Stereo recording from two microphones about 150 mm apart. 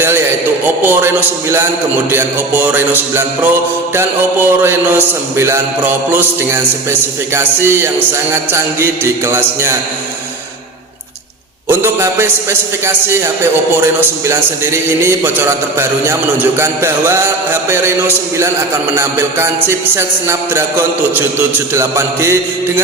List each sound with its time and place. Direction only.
0.9 s a man's voice: 15° right (ahead or behind)
11.7 s a man's voice: 15° right (ahead or behind)